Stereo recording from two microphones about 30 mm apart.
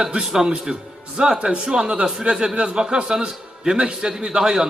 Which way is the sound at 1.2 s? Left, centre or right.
Right.